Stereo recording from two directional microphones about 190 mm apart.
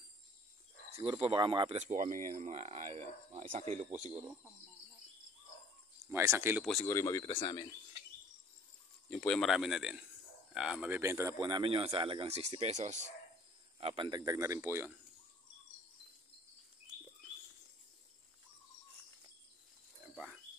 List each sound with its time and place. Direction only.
1.2 s speech: 25° right (ahead or behind)
1.8 s speech: 40° right (ahead or behind)
6.0 s speech: 15° right (ahead or behind)
6.6 s a man's voice: 5° left (ahead or behind)
6.9 s speech: 15° left (ahead or behind)
9.1 s a man's voice: 5° left (ahead or behind); by 11.3 s 15° right (ahead or behind)
11.3 s speech: 25° right (ahead or behind)